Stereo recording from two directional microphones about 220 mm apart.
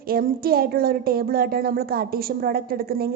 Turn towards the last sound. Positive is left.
turn(degrees=-45)  # may be behind; listen again after turning